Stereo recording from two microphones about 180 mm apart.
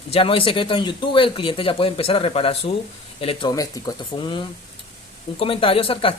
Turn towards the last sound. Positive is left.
turn(degrees=30)  # may be behind; listen again after turning